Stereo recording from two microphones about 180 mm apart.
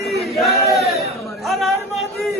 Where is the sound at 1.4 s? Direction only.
Centre (ahead or behind).